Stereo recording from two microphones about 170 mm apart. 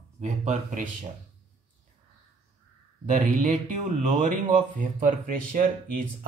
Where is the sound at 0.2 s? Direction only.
45° right (ahead or behind).